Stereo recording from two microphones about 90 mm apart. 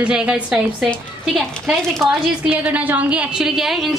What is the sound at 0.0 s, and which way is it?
Speech, 10° right (ahead or behind).